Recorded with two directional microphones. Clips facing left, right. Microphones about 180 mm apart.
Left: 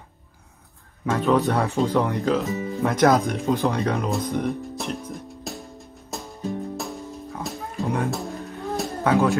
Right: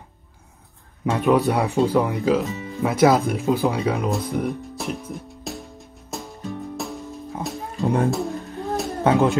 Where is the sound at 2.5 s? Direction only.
35° left (ahead or behind).